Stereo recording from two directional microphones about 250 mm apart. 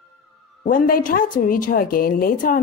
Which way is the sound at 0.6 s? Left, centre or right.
Left.